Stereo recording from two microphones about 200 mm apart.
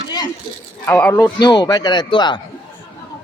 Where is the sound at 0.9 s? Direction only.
10° left (ahead or behind).